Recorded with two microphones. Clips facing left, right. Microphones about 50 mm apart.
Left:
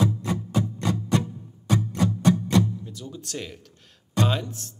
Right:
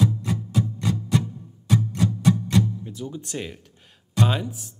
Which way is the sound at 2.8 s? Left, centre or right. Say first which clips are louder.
Right 4 dB; right.